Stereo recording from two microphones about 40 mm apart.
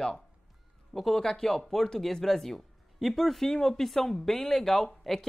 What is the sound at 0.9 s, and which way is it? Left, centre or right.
Speech, centre.